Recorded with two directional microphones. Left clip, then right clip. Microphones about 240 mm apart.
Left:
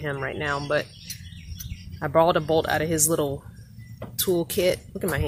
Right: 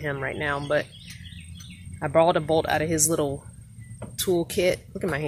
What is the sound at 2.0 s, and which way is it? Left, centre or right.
A woman's voice, centre.